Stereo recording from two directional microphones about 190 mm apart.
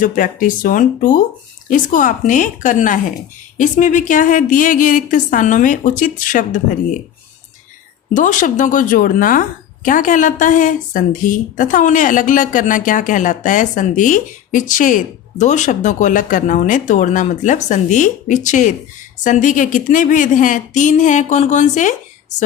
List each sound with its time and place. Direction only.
0.0 s a woman's voice: 45° left (ahead or behind)
8.1 s a woman's voice: 45° left (ahead or behind)